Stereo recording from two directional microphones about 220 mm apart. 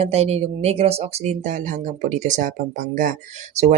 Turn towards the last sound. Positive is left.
turn(degrees=-35)  # may be behind; listen again after turning